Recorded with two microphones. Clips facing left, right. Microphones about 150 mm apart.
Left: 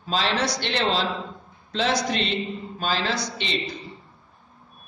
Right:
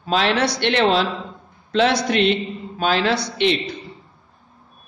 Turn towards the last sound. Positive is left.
turn(degrees=-65)  # may be behind; listen again after turning